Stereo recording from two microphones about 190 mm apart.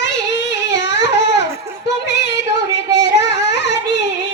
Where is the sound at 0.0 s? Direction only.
70° left (ahead or behind).